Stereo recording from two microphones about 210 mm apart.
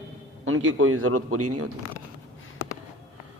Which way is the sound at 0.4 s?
75° right (ahead or behind).